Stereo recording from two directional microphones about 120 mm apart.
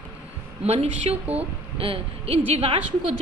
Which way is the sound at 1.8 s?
50° right (ahead or behind).